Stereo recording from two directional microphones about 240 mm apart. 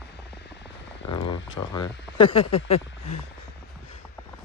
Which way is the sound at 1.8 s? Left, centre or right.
Left.